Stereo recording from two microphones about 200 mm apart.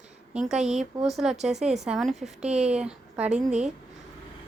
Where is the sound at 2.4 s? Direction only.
30° right (ahead or behind).